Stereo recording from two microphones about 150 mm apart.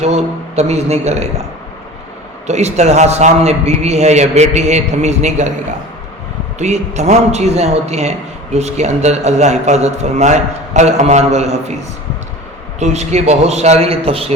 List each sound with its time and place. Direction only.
0.0 s a man's voice: 45° right (ahead or behind)
2.5 s a man's voice: 50° right (ahead or behind)
6.6 s a man's voice: 50° right (ahead or behind)
12.8 s a man's voice: 50° right (ahead or behind)